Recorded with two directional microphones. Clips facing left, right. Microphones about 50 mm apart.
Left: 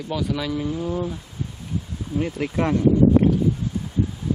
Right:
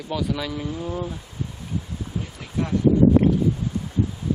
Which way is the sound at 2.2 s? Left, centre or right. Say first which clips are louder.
Left 8 dB; left.